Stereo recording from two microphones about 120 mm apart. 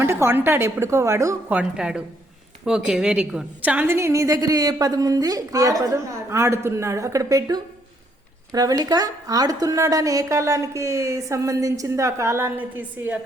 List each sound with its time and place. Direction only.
0.0 s a woman's voice: 20° right (ahead or behind)
1.5 s a woman's voice: 10° right (ahead or behind)